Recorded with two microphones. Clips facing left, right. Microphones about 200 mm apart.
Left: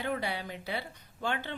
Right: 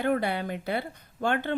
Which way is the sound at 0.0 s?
55° right (ahead or behind).